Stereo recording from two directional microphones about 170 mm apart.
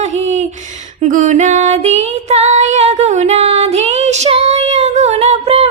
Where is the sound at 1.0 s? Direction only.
50° right (ahead or behind).